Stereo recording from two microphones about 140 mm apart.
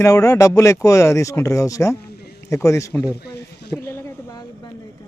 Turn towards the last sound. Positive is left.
turn(degrees=30)  # may be behind; listen again after turning